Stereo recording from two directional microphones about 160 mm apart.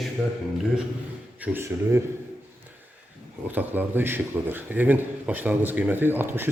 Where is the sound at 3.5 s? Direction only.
10° right (ahead or behind).